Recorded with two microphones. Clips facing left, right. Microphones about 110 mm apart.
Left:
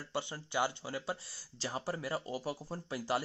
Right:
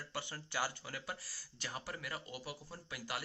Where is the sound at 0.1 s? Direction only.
20° left (ahead or behind).